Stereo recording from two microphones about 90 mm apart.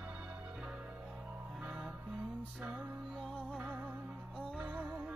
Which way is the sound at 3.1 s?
5° left (ahead or behind).